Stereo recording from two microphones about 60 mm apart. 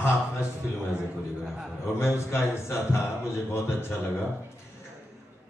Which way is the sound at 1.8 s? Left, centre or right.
Left.